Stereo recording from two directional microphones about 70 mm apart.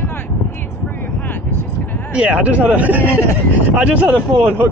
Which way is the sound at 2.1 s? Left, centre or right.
Centre.